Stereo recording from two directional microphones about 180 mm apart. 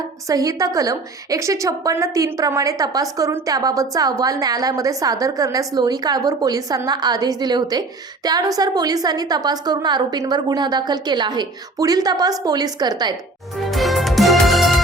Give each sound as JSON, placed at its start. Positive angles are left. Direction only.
{"t": 0.3, "sound": "a woman's voice", "side_deg": -20}
{"t": 13.7, "sound": "music", "side_deg": 0}